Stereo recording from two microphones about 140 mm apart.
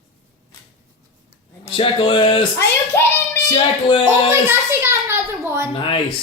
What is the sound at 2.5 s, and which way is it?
Speech, 15° left (ahead or behind).